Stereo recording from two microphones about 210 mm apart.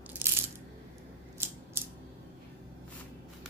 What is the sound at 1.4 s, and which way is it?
Scissors, 10° right (ahead or behind).